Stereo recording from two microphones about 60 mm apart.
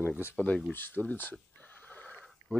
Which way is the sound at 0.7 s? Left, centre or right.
Left.